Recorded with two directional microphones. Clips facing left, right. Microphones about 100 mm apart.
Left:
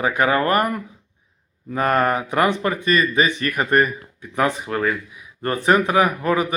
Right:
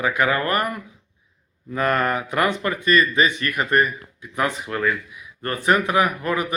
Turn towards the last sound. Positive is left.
turn(degrees=30)  # may be behind; listen again after turning